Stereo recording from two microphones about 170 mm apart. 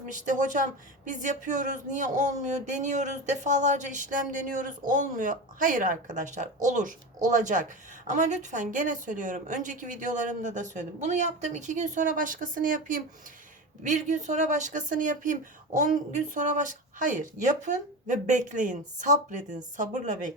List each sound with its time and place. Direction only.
0.1 s speech: 45° right (ahead or behind)